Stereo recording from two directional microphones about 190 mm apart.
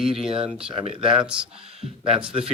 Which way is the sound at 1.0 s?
5° right (ahead or behind).